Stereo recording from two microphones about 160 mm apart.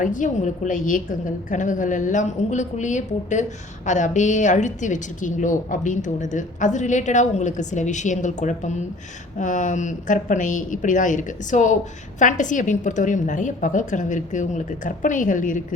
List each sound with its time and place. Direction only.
0.0 s a woman's voice: 55° left (ahead or behind)